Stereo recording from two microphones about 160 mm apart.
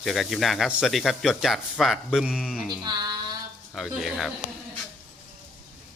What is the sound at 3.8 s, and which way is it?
Speech, centre (ahead or behind).